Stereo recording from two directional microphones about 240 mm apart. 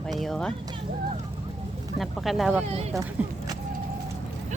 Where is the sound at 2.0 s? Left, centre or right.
Centre.